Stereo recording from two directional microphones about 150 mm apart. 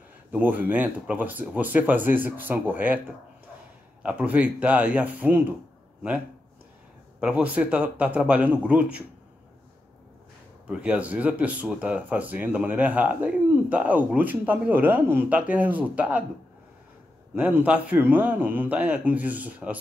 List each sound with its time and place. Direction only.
0.3 s speech: 10° right (ahead or behind)
4.0 s speech: 10° right (ahead or behind)
7.2 s speech: 5° right (ahead or behind)
10.7 s speech: 10° right (ahead or behind)
17.4 s speech: 10° right (ahead or behind)